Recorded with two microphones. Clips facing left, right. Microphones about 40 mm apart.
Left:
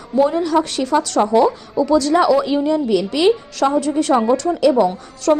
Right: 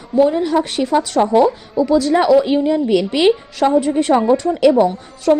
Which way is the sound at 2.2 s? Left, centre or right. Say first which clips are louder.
Right 2 dB; right.